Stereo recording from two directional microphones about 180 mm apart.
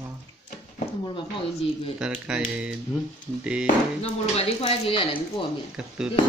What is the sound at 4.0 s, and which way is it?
A man's voice, 35° left (ahead or behind).